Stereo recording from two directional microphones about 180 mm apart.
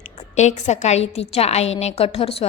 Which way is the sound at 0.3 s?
40° left (ahead or behind).